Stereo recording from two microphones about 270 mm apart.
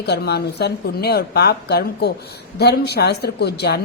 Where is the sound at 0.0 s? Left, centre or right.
Left.